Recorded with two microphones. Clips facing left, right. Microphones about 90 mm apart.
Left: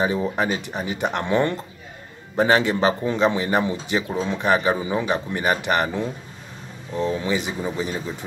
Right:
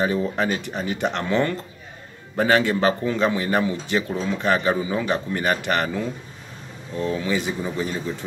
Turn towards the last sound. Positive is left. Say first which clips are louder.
# even
turn(degrees=15)  # may be behind; listen again after turning